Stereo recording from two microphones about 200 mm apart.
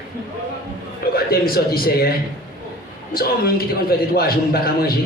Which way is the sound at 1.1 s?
50° left (ahead or behind).